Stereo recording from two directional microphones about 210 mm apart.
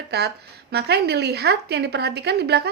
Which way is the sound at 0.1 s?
50° right (ahead or behind).